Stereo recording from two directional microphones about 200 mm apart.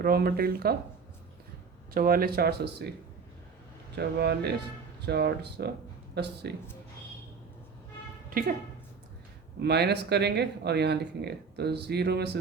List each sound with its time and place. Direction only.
0.0 s speech: 50° right (ahead or behind)
1.9 s speech: 45° right (ahead or behind)
3.9 s speech: 55° right (ahead or behind)
8.3 s a woman's voice: 45° right (ahead or behind)
9.6 s speech: 55° right (ahead or behind)